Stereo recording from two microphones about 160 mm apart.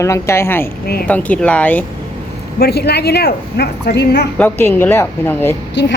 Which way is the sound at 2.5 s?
85° left.